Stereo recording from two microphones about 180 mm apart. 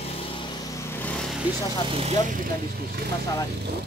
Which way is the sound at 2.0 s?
45° right (ahead or behind).